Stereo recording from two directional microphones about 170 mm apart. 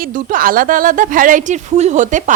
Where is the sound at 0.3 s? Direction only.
55° right (ahead or behind).